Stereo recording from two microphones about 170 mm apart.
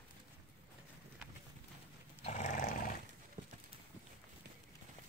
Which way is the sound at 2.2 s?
45° left (ahead or behind).